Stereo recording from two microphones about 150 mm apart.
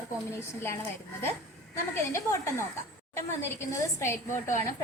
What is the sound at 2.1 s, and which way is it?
A woman's voice, 20° left (ahead or behind).